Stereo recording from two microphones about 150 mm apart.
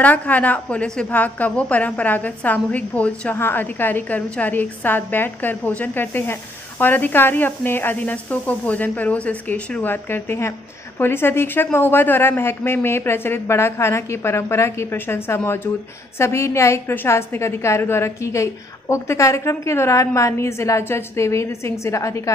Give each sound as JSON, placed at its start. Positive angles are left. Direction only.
{"t": 0.0, "sound": "a woman's voice", "side_deg": 10}